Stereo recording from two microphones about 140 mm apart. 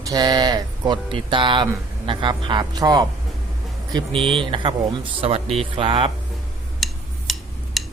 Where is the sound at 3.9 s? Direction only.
40° right (ahead or behind).